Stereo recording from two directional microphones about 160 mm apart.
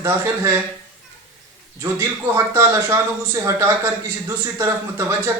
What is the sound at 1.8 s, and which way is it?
A man's voice, 15° right (ahead or behind).